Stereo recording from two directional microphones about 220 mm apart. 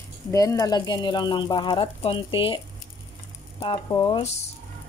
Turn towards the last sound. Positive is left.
turn(degrees=30)  # may be behind; listen again after turning